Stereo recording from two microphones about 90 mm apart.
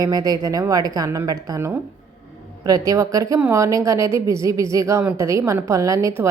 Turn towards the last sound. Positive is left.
turn(degrees=-35)  # may be behind; listen again after turning